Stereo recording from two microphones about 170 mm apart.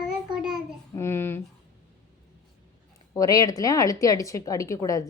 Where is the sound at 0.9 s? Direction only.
15° left (ahead or behind).